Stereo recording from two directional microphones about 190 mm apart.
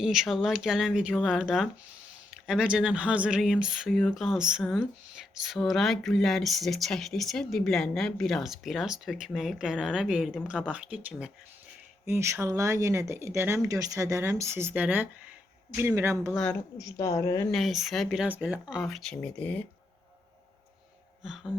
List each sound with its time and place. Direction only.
0.0 s speech: centre (ahead or behind)
16.3 s speech: 5° left (ahead or behind)
16.7 s a woman's voice: 15° left (ahead or behind)
17.5 s speech: centre (ahead or behind)
21.2 s speech: 5° right (ahead or behind)